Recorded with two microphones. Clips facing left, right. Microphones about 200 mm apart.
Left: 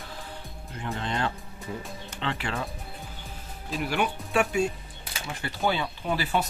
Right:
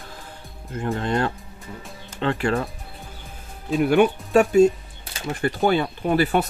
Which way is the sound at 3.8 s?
45° right (ahead or behind).